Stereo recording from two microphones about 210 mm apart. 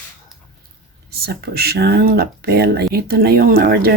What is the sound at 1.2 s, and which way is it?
Speech, 50° right (ahead or behind).